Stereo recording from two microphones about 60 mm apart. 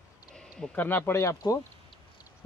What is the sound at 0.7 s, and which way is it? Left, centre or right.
Speech, left.